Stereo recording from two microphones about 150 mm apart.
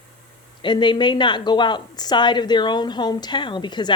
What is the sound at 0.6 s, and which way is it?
A woman's voice, 30° left (ahead or behind).